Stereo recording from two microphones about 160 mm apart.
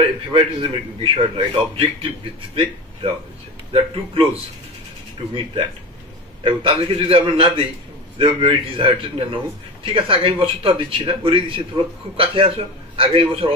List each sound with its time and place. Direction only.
0.0 s a man's voice: 30° right (ahead or behind)